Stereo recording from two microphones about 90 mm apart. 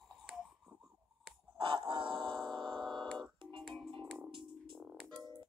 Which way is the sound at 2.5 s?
60° right (ahead or behind).